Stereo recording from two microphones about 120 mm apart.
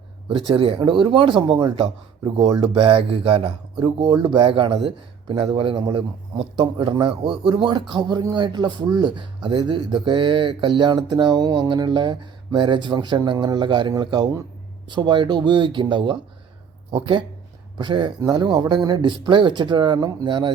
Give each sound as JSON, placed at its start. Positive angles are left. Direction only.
{"t": 0.3, "sound": "speech", "side_deg": -50}